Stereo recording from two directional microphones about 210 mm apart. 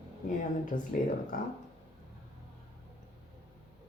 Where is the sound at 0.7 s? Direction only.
40° left (ahead or behind).